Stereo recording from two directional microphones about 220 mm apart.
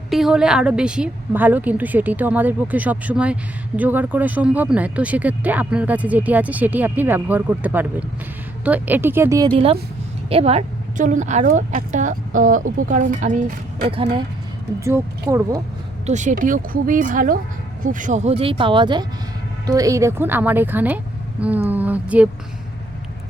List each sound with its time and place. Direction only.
0.1 s speech: centre (ahead or behind)
10.2 s a woman's voice: 25° right (ahead or behind)
14.8 s speech: 10° right (ahead or behind)
16.0 s a woman's voice: 35° right (ahead or behind); by 22.3 s 5° right (ahead or behind)